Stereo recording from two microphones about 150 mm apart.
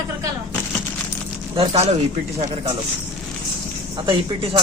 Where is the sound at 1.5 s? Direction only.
40° right (ahead or behind).